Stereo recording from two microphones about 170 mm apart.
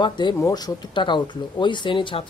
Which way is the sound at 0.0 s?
25° left (ahead or behind).